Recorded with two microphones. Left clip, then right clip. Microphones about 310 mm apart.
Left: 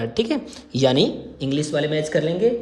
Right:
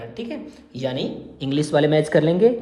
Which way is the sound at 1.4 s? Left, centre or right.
Centre.